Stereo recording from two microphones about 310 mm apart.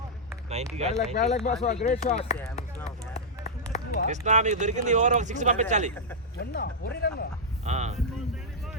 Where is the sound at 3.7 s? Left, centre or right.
Left.